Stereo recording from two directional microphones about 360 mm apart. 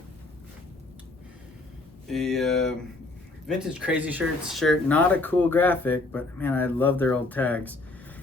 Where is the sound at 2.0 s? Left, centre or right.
Centre.